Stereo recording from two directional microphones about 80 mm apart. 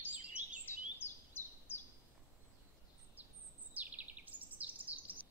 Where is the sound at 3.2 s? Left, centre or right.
Right.